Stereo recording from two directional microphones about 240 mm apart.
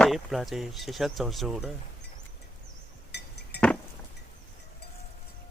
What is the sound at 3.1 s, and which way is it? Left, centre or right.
Chink, left.